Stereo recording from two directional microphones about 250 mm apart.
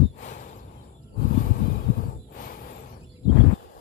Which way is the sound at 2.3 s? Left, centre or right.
Left.